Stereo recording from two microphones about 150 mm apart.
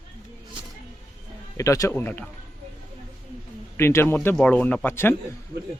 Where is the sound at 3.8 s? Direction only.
15° left (ahead or behind).